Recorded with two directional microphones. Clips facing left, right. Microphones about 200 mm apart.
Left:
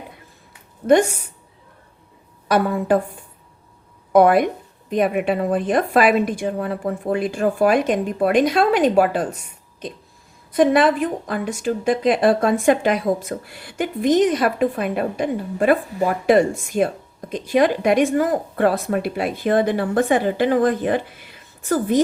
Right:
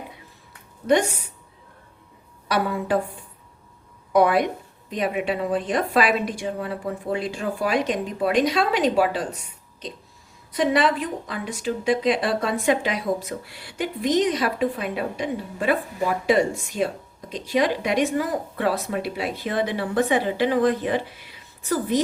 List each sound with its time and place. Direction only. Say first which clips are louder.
2.5 s a woman's voice: left 5 dB; 50° left (ahead or behind)
4.1 s a woman's voice: left 5 dB; 50° left (ahead or behind)
10.5 s a woman's voice: left 5 dB; 50° left (ahead or behind)